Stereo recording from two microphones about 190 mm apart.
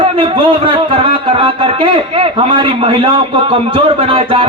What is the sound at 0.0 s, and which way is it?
A man's voice, 25° right (ahead or behind).